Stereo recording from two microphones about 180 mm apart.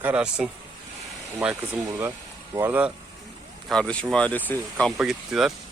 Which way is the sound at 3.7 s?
5° left (ahead or behind).